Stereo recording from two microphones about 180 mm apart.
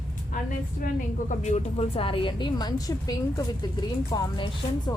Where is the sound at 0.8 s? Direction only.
45° left (ahead or behind).